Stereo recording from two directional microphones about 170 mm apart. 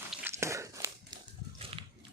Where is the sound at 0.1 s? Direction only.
10° right (ahead or behind).